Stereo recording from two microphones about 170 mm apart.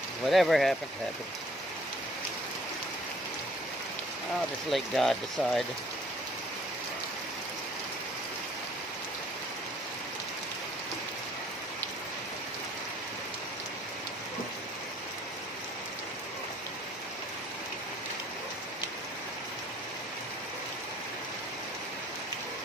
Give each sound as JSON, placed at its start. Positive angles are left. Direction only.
{"t": 0.3, "sound": "speech", "side_deg": 0}
{"t": 4.6, "sound": "speech", "side_deg": 0}